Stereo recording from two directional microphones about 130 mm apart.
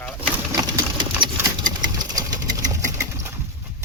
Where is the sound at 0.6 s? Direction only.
35° right (ahead or behind).